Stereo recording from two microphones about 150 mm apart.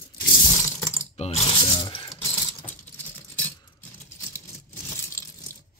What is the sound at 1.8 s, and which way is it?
Speech, 30° left (ahead or behind).